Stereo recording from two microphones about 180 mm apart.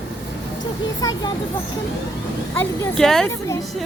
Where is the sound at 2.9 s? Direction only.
5° left (ahead or behind).